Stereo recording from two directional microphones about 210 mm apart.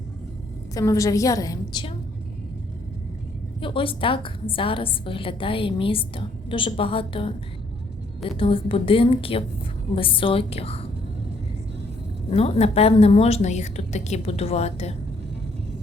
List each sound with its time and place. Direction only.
0.7 s a woman's voice: 15° left (ahead or behind)
3.6 s a woman's voice: 25° left (ahead or behind)
12.3 s a woman's voice: 30° left (ahead or behind)